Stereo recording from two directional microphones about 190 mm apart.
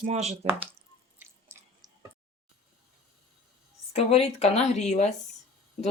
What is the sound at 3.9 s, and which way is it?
A woman's voice, 35° left (ahead or behind).